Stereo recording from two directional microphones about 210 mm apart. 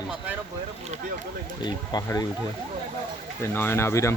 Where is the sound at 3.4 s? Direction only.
10° left (ahead or behind).